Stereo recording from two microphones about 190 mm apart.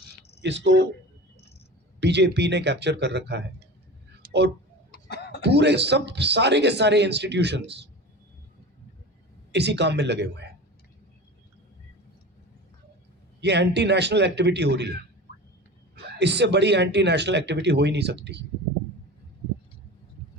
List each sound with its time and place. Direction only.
0.4 s speech: 70° right (ahead or behind)
2.0 s speech: 65° right (ahead or behind)
4.2 s a sound: 60° right (ahead or behind)
4.9 s a sound: 60° left (ahead or behind)
5.4 s speech: 65° right (ahead or behind)
9.5 s speech: 65° right (ahead or behind)
13.4 s speech: 65° right (ahead or behind)
16.1 s speech: 65° right (ahead or behind)